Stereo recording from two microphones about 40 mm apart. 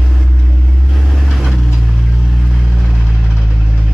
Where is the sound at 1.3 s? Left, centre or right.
Centre.